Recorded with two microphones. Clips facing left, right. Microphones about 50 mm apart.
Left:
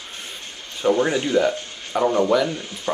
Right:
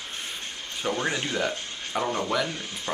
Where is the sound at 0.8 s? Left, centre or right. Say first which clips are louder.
Left 10 dB; centre.